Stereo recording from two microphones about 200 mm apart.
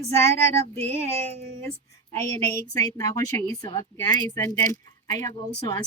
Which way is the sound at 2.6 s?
15° left (ahead or behind).